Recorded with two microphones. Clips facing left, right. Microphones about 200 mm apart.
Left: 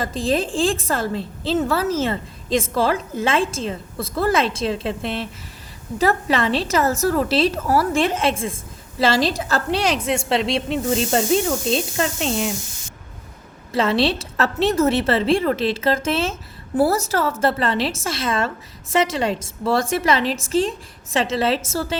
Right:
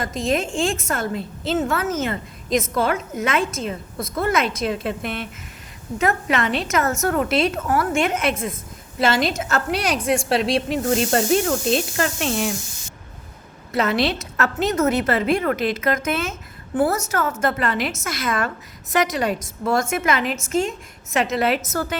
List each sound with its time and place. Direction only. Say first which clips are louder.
0.0 s a woman's voice: left 1 dB; 30° left (ahead or behind)
13.7 s a woman's voice: left 2 dB; 30° left (ahead or behind)